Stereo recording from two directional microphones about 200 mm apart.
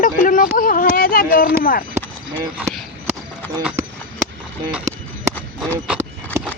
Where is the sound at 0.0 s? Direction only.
40° left (ahead or behind).